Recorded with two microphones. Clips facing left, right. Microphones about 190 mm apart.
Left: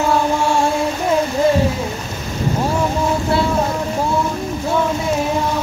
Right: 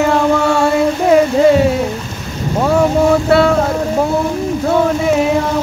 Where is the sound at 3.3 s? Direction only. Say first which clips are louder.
Right 7 dB; 70° right (ahead or behind).